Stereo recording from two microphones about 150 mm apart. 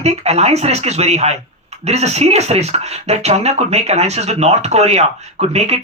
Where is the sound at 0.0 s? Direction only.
45° right (ahead or behind).